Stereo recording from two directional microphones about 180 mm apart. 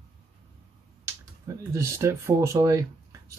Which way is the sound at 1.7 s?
15° right (ahead or behind).